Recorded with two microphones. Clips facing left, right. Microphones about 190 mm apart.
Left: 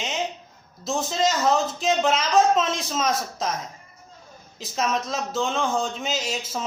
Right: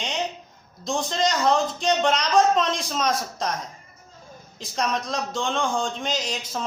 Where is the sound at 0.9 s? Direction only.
5° left (ahead or behind).